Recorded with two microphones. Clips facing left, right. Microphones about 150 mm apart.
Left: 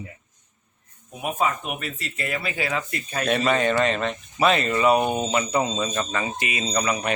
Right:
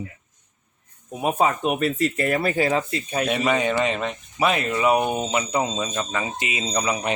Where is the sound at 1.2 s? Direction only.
35° right (ahead or behind).